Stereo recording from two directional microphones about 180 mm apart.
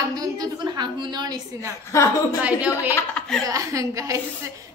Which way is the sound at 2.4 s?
5° right (ahead or behind).